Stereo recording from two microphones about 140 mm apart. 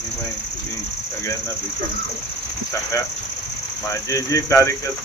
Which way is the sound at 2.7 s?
20° left (ahead or behind).